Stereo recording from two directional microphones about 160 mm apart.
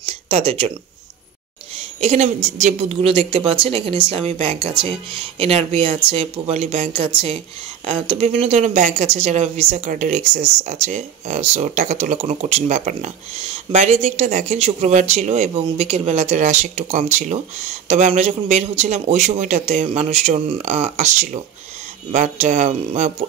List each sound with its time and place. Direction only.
0.0 s speech: 35° right (ahead or behind)
2.0 s speech: 45° right (ahead or behind)
9.8 s speech: 55° right (ahead or behind)